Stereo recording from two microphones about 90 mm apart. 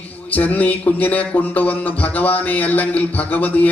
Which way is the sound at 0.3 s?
20° left (ahead or behind).